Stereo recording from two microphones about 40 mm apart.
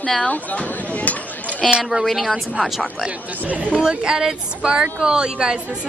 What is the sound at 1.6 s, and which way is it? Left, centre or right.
Speech, centre.